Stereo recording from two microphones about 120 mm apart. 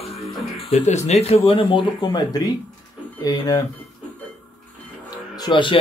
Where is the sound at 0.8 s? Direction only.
70° left (ahead or behind).